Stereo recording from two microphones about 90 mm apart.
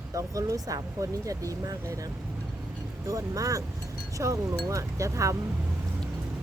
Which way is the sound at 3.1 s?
40° right (ahead or behind).